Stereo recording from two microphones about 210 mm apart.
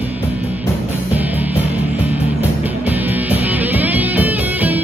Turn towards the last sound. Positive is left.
turn(degrees=-10)  # may be behind; listen again after turning